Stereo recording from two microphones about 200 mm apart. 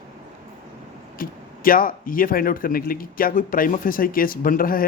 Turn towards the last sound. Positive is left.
turn(degrees=45)  # may be behind; listen again after turning